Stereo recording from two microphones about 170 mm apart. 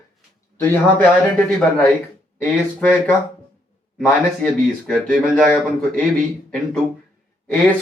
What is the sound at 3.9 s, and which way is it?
Speech, 10° left (ahead or behind).